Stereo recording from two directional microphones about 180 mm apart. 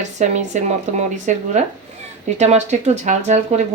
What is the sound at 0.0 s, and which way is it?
Speech, 40° right (ahead or behind).